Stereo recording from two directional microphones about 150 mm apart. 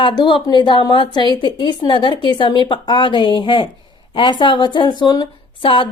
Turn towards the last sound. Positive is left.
turn(degrees=35)  # may be behind; listen again after turning